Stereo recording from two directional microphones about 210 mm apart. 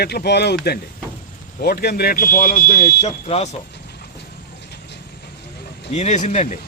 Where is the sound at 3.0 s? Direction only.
30° left (ahead or behind).